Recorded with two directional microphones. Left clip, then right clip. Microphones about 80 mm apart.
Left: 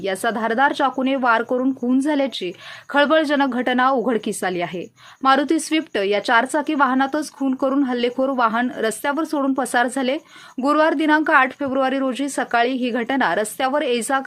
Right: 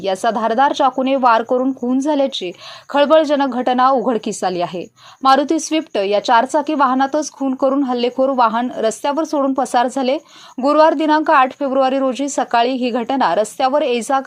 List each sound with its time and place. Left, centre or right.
0.0 s a woman's voice: centre
1.5 s a woman's voice: centre; by 4.7 s right
5.2 s a woman's voice: centre
7.9 s a woman's voice: centre